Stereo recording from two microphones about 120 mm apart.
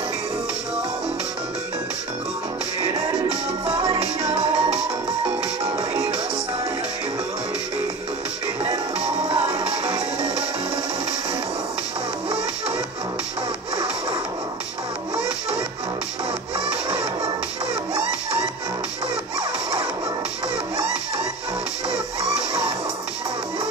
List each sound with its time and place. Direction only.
2.8 s music: 55° right (ahead or behind)
9.3 s music: 55° right (ahead or behind)